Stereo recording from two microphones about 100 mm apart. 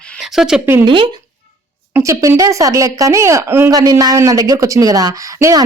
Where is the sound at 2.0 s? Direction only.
30° right (ahead or behind).